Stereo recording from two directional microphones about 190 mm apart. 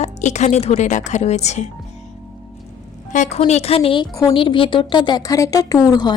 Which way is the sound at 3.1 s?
40° left (ahead or behind).